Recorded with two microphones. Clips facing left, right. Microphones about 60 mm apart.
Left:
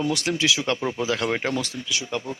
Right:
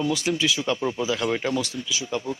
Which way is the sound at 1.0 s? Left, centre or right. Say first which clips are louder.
Left 2 dB; left.